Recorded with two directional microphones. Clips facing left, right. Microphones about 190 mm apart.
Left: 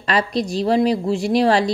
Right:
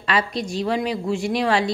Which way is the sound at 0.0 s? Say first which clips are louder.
Left 3 dB; 35° left (ahead or behind).